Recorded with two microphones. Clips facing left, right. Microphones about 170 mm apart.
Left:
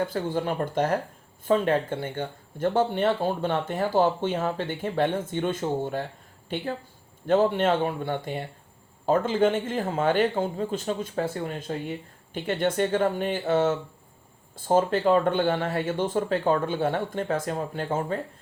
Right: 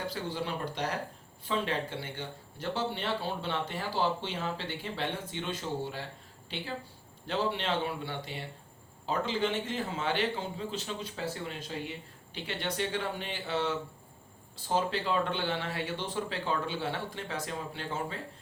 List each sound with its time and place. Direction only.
0.0 s a man's voice: 50° left (ahead or behind)